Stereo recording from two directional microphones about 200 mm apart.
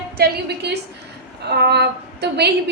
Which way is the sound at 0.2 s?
55° right (ahead or behind).